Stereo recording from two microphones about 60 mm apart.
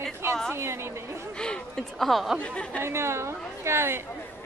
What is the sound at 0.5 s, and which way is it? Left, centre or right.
Speech, right.